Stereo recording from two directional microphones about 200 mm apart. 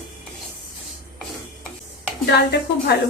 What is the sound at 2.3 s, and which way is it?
Speech, 55° left (ahead or behind).